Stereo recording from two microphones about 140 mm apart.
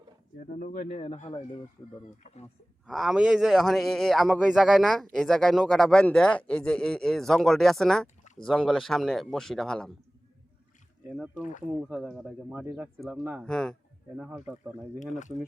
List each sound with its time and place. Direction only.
0.5 s speech: 75° left (ahead or behind)
0.9 s speech: 55° left (ahead or behind)
2.8 s a man's voice: centre (ahead or behind)
11.9 s a man's voice: 5° right (ahead or behind)
13.4 s a man's voice: 5° left (ahead or behind)
14.2 s speech: 10° right (ahead or behind)
14.9 s speech: 60° left (ahead or behind)